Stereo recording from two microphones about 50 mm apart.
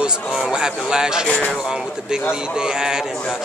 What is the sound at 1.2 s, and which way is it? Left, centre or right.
Speech, left.